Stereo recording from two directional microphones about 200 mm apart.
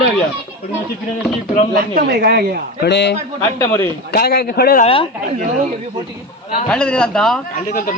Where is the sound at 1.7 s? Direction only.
50° right (ahead or behind).